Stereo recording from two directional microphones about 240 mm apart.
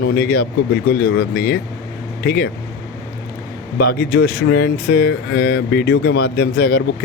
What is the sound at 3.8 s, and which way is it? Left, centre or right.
Speech, left.